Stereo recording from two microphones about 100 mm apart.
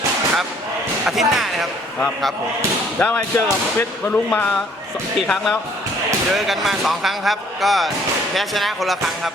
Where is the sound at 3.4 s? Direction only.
25° left (ahead or behind).